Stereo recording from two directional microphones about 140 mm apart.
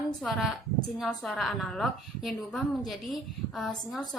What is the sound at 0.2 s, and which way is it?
A woman's voice, centre (ahead or behind).